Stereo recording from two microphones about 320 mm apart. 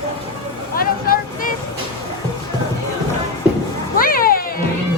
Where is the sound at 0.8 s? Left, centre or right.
Left.